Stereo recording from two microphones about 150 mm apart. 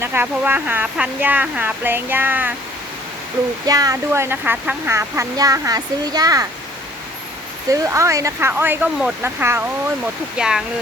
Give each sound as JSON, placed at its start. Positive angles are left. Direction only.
{"t": 0.0, "sound": "speech", "side_deg": -15}
{"t": 3.7, "sound": "a child's voice", "side_deg": -25}
{"t": 7.7, "sound": "speech", "side_deg": -20}
{"t": 10.3, "sound": "speech", "side_deg": -5}